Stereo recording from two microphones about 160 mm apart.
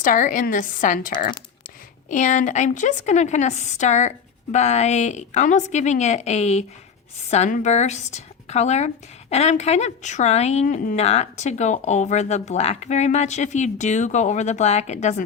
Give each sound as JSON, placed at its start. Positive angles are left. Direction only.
{"t": 0.0, "sound": "a woman's voice", "side_deg": 55}
{"t": 10.9, "sound": "speech", "side_deg": 45}